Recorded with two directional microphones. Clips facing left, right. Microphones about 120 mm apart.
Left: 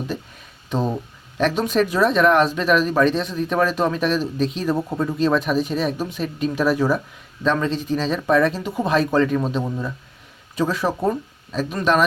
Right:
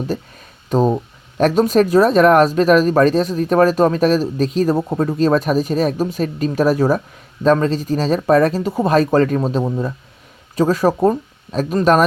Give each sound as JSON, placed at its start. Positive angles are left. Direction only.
{"t": 0.7, "sound": "speech", "side_deg": -40}